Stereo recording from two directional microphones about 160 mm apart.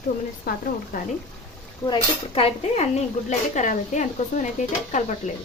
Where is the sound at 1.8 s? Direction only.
30° left (ahead or behind); by 5.1 s 50° left (ahead or behind).